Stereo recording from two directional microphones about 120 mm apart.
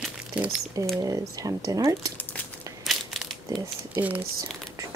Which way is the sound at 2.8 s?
Centre (ahead or behind).